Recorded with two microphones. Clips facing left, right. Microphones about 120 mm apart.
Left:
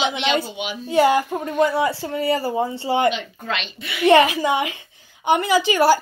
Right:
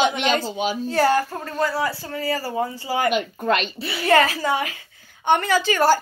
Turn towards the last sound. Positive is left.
turn(degrees=10)  # may be behind; listen again after turning